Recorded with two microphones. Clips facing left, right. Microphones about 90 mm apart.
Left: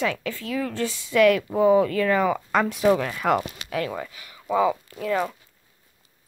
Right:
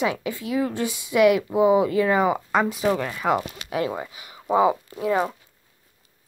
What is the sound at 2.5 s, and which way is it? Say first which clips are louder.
Speech: left 2 dB; centre (ahead or behind).